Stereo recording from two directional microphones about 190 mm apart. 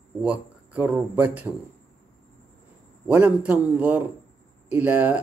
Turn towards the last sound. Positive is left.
turn(degrees=-10)  # may be behind; listen again after turning